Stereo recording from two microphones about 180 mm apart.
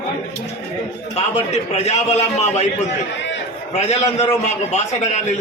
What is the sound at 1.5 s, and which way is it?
A man's voice, 35° left (ahead or behind).